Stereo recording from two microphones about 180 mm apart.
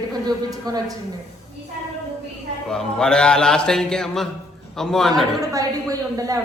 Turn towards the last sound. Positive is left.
turn(degrees=-20)  # may be behind; listen again after turning